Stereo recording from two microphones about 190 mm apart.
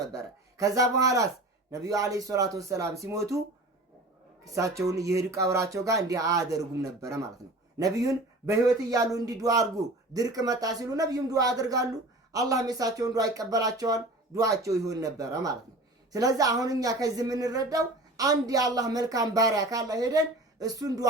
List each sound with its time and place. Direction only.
0.0 s speech: 15° right (ahead or behind)
4.4 s a woman's voice: 15° right (ahead or behind)
7.8 s a woman's voice: 20° right (ahead or behind)